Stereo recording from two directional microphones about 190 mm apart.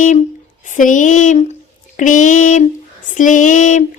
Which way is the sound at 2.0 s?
40° left (ahead or behind).